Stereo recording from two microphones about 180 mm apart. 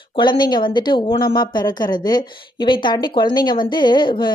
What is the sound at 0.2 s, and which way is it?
A woman's voice, 25° left (ahead or behind).